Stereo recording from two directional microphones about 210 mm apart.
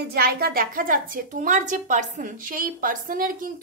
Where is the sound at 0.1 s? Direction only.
45° right (ahead or behind).